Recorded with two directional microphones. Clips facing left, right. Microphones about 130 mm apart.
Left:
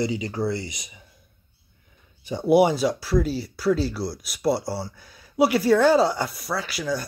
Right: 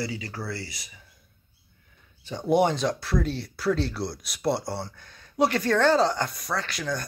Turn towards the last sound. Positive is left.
turn(degrees=5)  # may be behind; listen again after turning